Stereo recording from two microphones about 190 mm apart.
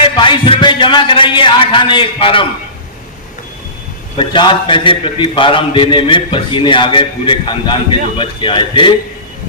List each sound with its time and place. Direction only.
0.0 s a man's voice: 25° left (ahead or behind)
4.2 s a man's voice: 25° left (ahead or behind)